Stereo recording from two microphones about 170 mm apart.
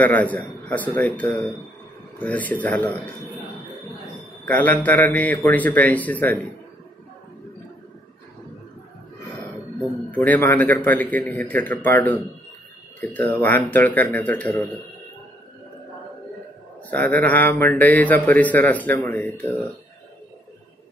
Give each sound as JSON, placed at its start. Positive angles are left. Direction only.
{"t": 0.0, "sound": "a man's voice", "side_deg": 10}
{"t": 4.5, "sound": "a man's voice", "side_deg": 10}
{"t": 10.1, "sound": "a man's voice", "side_deg": 10}
{"t": 16.9, "sound": "a man's voice", "side_deg": 10}